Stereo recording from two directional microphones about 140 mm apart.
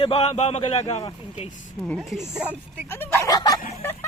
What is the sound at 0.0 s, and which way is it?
A man's voice, 40° left (ahead or behind).